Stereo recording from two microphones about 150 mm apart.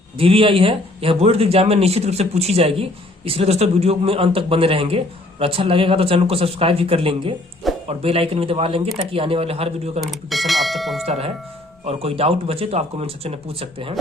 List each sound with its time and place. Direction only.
0.2 s speech: 40° right (ahead or behind)
10.0 s speech: centre (ahead or behind)
11.0 s speech: 45° right (ahead or behind)